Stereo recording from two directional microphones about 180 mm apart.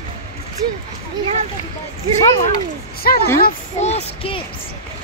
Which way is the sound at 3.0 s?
55° left (ahead or behind).